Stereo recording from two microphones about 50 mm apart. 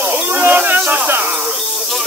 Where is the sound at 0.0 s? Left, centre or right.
Right.